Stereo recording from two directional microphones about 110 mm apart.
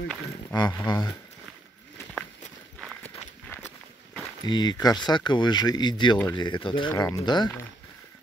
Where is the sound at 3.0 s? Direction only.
20° left (ahead or behind).